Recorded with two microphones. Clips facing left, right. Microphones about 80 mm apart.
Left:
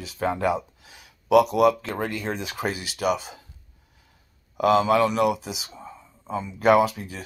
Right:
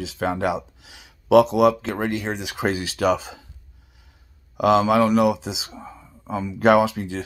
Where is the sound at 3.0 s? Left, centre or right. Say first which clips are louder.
Right 4 dB; right.